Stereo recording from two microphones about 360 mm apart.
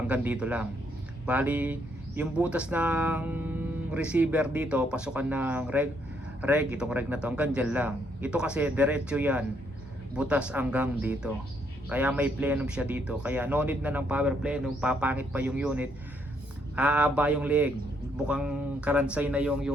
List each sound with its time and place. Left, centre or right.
0.1 s speech: centre